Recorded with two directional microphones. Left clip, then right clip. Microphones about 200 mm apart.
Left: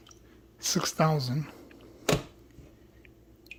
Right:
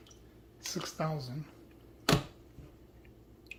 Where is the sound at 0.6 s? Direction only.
70° left (ahead or behind).